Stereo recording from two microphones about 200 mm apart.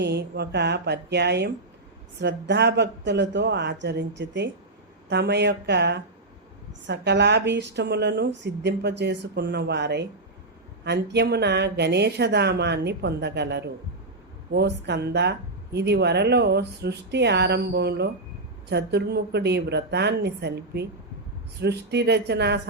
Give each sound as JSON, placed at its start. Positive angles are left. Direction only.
{"t": 0.0, "sound": "speech", "side_deg": -55}